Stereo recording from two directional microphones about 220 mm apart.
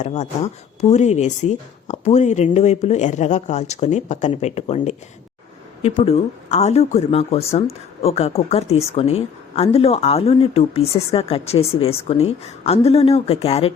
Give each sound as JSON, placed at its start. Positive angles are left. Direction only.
{"t": 0.0, "sound": "speech", "side_deg": 30}